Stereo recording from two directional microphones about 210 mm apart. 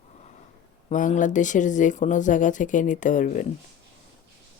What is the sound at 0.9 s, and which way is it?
Speech, 35° left (ahead or behind).